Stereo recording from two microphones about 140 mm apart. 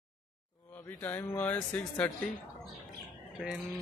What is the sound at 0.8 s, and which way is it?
A man's voice, 15° left (ahead or behind).